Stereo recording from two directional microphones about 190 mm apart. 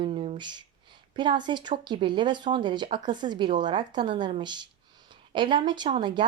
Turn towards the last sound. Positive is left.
turn(degrees=-25)  # may be behind; listen again after turning